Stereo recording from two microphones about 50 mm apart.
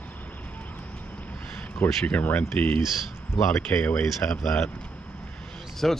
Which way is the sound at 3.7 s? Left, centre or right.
Left.